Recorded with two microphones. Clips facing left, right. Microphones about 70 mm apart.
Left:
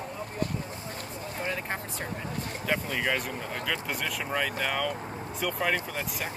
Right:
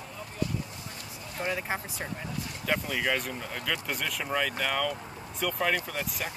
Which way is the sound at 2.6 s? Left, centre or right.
Centre.